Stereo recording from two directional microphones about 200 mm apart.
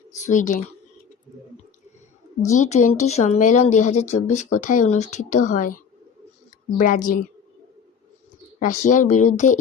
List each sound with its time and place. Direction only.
0.1 s speech: 40° left (ahead or behind)
2.4 s speech: 35° left (ahead or behind)
8.5 s speech: 40° left (ahead or behind)